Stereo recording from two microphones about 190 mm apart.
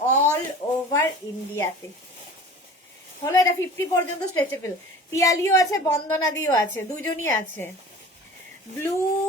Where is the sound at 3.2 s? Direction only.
15° left (ahead or behind).